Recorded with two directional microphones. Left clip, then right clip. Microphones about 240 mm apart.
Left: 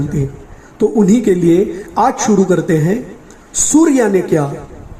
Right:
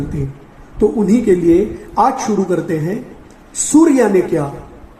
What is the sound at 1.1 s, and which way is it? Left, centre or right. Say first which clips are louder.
Speech: even; left.